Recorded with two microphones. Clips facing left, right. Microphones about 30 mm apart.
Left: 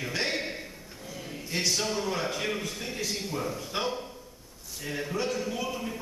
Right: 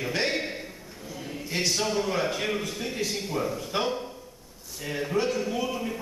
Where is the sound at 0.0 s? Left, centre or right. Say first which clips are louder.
Right 3 dB; centre.